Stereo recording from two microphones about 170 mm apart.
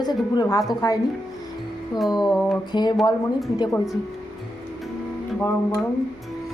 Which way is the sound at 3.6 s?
20° left (ahead or behind).